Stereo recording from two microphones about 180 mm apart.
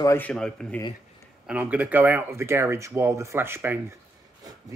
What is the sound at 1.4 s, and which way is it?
Speech, 5° right (ahead or behind).